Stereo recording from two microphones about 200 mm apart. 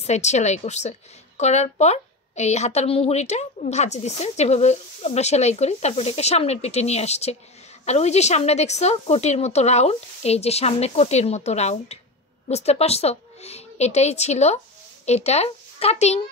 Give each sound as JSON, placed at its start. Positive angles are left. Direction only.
{"t": 0.0, "sound": "a woman's voice", "side_deg": 35}